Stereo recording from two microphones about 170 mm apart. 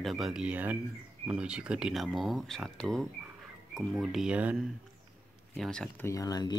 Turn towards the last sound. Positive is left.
turn(degrees=20)  # may be behind; listen again after turning